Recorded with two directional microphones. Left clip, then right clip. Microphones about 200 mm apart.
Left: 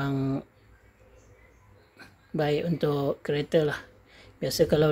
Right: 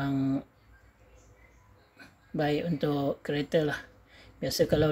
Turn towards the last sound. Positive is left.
turn(degrees=20)  # may be behind; listen again after turning